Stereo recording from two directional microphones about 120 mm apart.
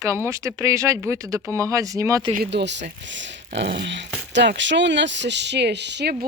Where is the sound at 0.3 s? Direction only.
25° right (ahead or behind).